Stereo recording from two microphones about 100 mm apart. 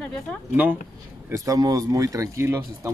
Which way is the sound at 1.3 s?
35° right (ahead or behind).